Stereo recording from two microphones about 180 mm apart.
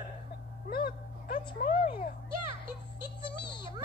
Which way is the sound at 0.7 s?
60° left (ahead or behind).